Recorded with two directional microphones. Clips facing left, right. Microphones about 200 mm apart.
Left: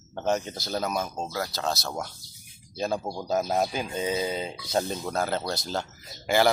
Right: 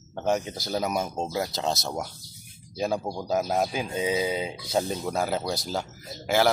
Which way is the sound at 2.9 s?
5° left (ahead or behind).